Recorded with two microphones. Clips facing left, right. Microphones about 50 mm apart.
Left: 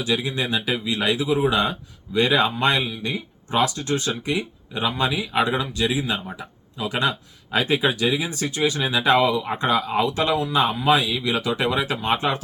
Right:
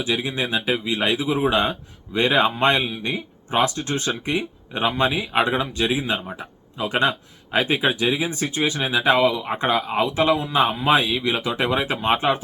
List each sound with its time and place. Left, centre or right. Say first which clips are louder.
0.0 s speech: even; right